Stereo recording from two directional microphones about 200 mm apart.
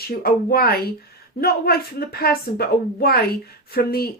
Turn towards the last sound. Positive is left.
turn(degrees=50)  # may be behind; listen again after turning